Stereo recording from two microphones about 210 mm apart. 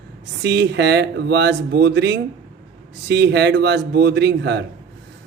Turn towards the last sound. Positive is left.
turn(degrees=-55)  # may be behind; listen again after turning